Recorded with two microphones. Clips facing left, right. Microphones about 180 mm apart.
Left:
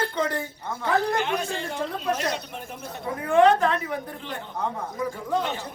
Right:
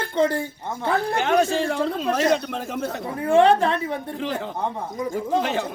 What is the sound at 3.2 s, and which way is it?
Speech, 30° right (ahead or behind).